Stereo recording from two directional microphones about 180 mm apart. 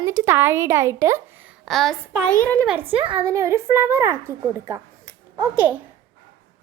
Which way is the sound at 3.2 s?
15° right (ahead or behind).